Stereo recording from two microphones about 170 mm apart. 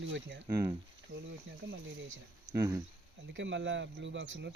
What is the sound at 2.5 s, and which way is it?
Speech, 20° right (ahead or behind).